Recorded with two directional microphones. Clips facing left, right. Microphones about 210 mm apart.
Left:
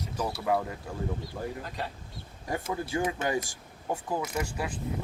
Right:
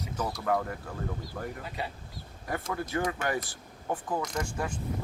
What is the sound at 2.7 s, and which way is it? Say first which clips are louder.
Speech: left 1 dB; 15° left (ahead or behind).